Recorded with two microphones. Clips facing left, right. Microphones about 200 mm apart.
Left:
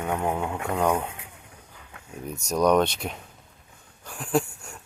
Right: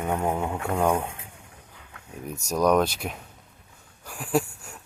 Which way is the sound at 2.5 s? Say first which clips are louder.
Left 1 dB; centre (ahead or behind).